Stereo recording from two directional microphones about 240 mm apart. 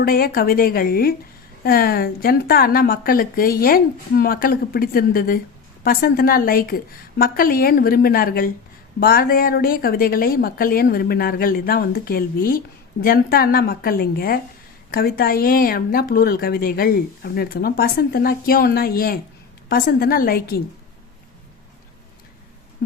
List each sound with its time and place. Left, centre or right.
0.0 s a woman's voice: left